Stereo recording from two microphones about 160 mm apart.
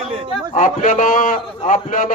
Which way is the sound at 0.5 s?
55° left (ahead or behind).